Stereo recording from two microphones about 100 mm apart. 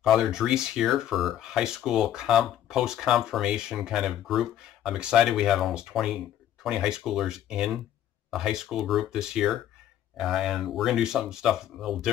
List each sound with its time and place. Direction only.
0.0 s speech: 5° right (ahead or behind)